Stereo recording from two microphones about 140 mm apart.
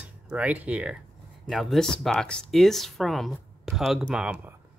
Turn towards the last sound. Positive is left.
turn(degrees=-10)  # may be behind; listen again after turning